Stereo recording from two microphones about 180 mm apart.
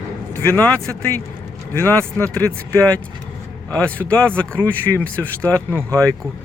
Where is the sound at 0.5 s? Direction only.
10° left (ahead or behind).